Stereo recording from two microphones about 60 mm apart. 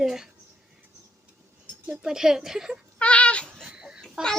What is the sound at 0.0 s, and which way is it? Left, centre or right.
Speech, centre.